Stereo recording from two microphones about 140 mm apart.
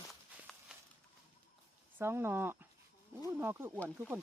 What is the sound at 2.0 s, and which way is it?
Speech, 15° right (ahead or behind).